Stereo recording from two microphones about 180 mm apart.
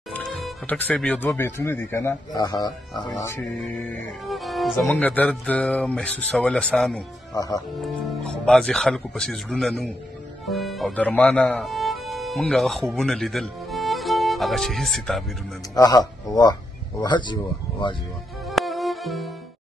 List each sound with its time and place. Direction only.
0.1 s speech: 5° left (ahead or behind)
3.3 s speech: 5° left (ahead or behind)
7.3 s speech: 20° left (ahead or behind)
7.8 s speech: 5° left (ahead or behind)
15.7 s speech: 20° left (ahead or behind)
18.5 s music: centre (ahead or behind)